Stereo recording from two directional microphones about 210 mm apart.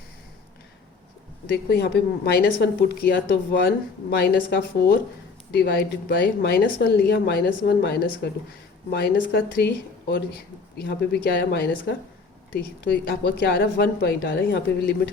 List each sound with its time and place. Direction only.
1.5 s speech: 50° left (ahead or behind)